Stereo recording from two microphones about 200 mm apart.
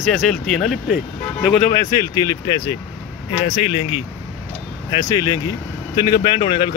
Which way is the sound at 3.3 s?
30° left (ahead or behind).